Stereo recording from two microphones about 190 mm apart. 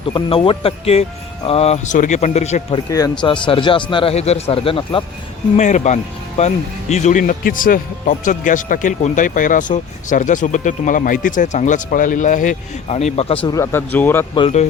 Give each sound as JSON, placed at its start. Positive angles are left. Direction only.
{"t": 0.1, "sound": "a man's voice", "side_deg": 30}
{"t": 2.9, "sound": "a man's voice", "side_deg": 20}
{"t": 5.5, "sound": "speech", "side_deg": 40}
{"t": 13.5, "sound": "speech", "side_deg": 15}
{"t": 14.3, "sound": "speech", "side_deg": 30}